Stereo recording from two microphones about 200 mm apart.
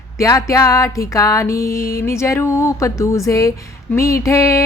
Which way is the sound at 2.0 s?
15° left (ahead or behind).